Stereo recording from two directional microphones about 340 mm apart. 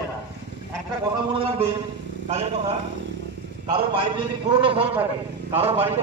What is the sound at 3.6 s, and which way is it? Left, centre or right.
A man's voice, centre.